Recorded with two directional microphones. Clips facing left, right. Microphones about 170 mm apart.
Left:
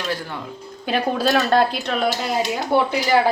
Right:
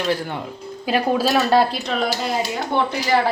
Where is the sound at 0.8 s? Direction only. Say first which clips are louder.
Right 1 dB; 5° right (ahead or behind).